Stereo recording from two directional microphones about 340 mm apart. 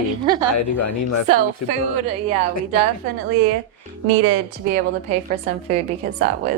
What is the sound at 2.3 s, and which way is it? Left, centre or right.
Speech, right.